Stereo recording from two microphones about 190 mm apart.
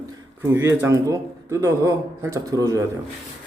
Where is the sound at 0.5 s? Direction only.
10° right (ahead or behind).